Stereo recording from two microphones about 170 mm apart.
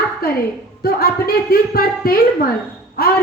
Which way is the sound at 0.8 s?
65° left (ahead or behind).